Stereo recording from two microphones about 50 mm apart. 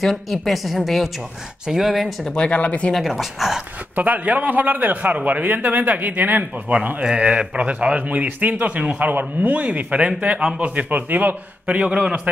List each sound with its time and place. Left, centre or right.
0.0 s a woman's voice: centre
2.3 s speech: left
3.0 s a woman's voice: centre
3.9 s a man's voice: right
7.2 s a man's voice: right
11.6 s a man's voice: right